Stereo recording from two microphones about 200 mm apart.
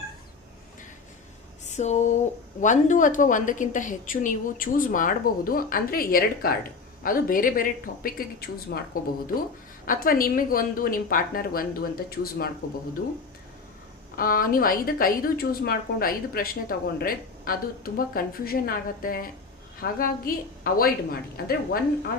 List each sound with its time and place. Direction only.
1.7 s a sound: 35° left (ahead or behind)
2.6 s a woman's voice: 40° left (ahead or behind)
9.8 s a woman's voice: 45° left (ahead or behind)
14.2 s a woman's voice: 45° left (ahead or behind)